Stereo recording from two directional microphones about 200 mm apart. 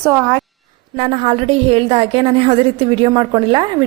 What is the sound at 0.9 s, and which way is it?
A woman's voice, 30° right (ahead or behind).